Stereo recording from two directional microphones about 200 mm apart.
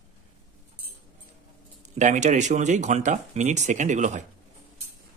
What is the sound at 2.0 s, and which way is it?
Speech, 35° right (ahead or behind).